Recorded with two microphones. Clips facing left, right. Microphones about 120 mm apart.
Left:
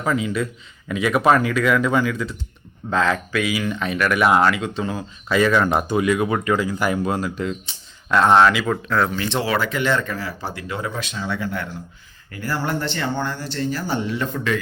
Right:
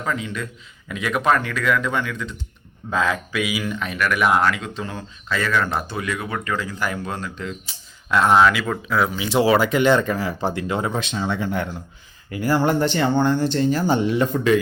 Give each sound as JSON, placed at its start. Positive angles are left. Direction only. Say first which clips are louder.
{"t": 0.0, "sound": "speech", "louder": "left 5 dB", "side_deg": 10}
{"t": 2.9, "sound": "speech", "louder": "left 2 dB", "side_deg": -10}
{"t": 5.3, "sound": "speech", "louder": "left 5 dB", "side_deg": 20}